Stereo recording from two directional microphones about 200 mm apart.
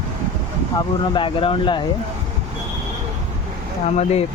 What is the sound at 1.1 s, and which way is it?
Speech, 25° left (ahead or behind).